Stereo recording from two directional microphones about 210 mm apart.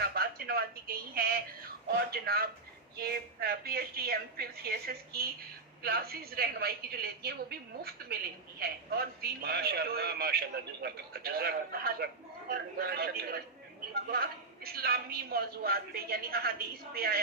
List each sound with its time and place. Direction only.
0.0 s a woman's voice: 45° right (ahead or behind)